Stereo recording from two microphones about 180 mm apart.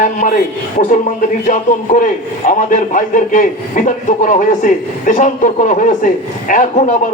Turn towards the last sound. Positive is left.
turn(degrees=45)  # may be behind; listen again after turning